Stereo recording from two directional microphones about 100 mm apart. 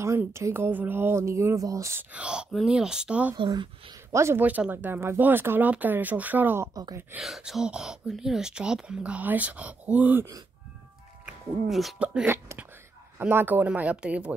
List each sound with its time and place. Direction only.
0.2 s speech: 25° right (ahead or behind)
2.1 s speech: 10° right (ahead or behind)
3.3 s speech: 50° right (ahead or behind)
4.1 s speech: 25° right (ahead or behind)
6.7 s speech: 40° right (ahead or behind)
7.2 s speech: 5° right (ahead or behind)
11.2 s speech: centre (ahead or behind)
12.0 s speech: 10° right (ahead or behind)
12.3 s a sound: 20° right (ahead or behind)
13.2 s speech: 20° right (ahead or behind)